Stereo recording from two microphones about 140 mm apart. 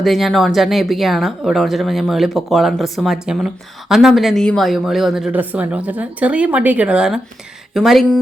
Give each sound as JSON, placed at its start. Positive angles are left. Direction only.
{"t": 0.0, "sound": "speech", "side_deg": 0}